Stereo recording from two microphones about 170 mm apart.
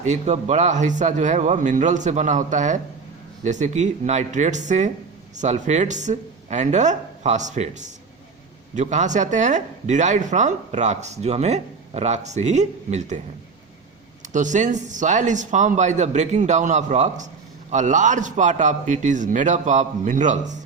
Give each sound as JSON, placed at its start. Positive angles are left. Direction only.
{"t": 0.0, "sound": "speech", "side_deg": -45}